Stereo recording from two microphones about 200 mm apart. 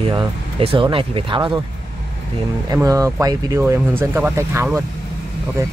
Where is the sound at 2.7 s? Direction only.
15° right (ahead or behind).